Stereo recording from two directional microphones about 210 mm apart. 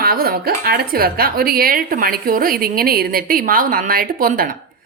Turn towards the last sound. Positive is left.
turn(degrees=-40)  # may be behind; listen again after turning